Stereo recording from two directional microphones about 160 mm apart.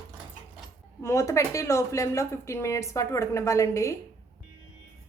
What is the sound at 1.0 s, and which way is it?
A woman's voice, 15° left (ahead or behind).